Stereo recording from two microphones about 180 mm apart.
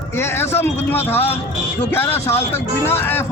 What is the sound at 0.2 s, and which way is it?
Speech, 15° left (ahead or behind).